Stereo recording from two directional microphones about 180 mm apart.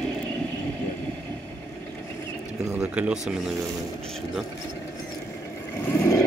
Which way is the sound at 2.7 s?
5° right (ahead or behind).